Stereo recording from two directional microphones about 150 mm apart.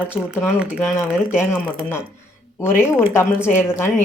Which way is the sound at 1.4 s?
15° left (ahead or behind).